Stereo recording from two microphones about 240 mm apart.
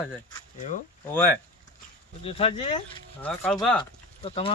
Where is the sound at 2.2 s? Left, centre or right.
Left.